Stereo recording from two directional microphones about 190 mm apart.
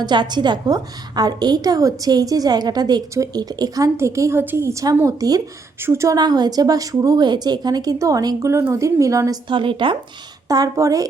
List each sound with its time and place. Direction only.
0.0 s a woman's voice: 25° right (ahead or behind)